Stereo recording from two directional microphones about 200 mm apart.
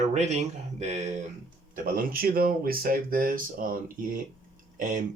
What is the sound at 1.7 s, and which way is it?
Speech, 45° right (ahead or behind).